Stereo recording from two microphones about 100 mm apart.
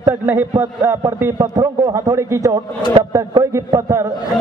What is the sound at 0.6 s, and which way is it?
A man's voice, 30° right (ahead or behind).